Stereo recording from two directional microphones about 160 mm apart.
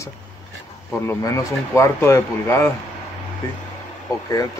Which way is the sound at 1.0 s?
20° left (ahead or behind).